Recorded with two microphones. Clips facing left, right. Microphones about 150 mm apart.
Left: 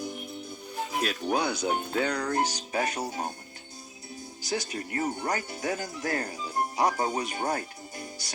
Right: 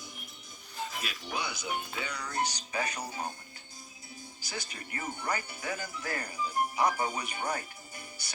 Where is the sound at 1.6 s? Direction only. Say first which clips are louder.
Left 9 dB; 60° left (ahead or behind).